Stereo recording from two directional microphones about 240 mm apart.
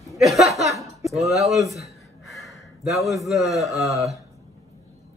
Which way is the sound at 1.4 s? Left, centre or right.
Right.